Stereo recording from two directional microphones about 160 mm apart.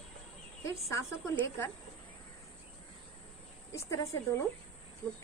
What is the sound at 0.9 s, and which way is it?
Speech, 20° left (ahead or behind).